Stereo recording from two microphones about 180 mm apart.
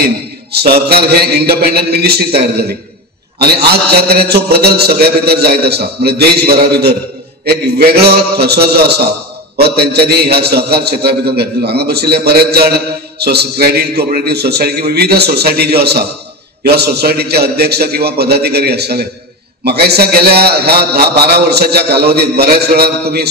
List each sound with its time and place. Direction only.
0.5 s a man's voice: 60° right (ahead or behind)
3.9 s a man's voice: 60° right (ahead or behind)